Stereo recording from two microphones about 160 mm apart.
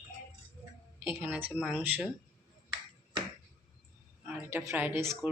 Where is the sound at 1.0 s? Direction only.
10° right (ahead or behind).